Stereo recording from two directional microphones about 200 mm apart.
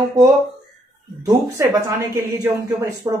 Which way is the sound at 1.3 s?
15° right (ahead or behind).